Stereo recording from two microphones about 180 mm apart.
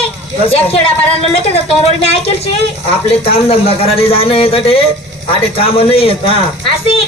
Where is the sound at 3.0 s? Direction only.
35° left (ahead or behind).